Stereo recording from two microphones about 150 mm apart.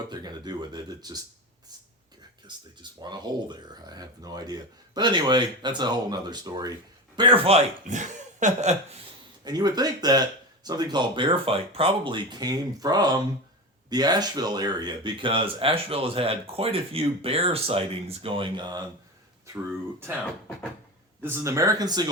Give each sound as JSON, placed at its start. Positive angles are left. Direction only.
{"t": 0.1, "sound": "a sound", "side_deg": -25}
{"t": 3.0, "sound": "speech", "side_deg": -30}
{"t": 7.5, "sound": "speech", "side_deg": -55}
{"t": 9.4, "sound": "speech", "side_deg": -25}
{"t": 21.2, "sound": "speech", "side_deg": -15}